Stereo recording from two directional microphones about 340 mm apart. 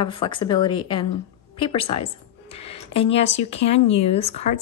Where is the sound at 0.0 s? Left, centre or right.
Centre.